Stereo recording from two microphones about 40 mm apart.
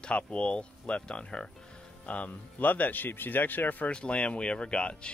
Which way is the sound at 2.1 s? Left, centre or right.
Left.